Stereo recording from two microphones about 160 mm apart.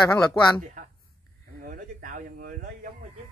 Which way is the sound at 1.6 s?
60° right (ahead or behind).